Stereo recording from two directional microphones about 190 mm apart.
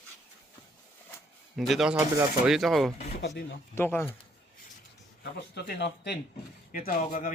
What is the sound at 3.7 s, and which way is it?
Speech, 10° left (ahead or behind).